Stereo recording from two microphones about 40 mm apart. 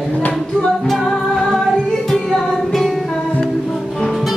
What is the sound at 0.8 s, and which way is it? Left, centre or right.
Music, centre.